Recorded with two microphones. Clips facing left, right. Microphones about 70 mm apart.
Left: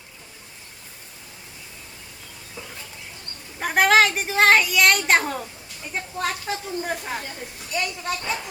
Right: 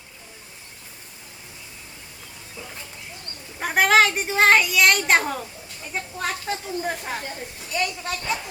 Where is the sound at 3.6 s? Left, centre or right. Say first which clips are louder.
Even; centre.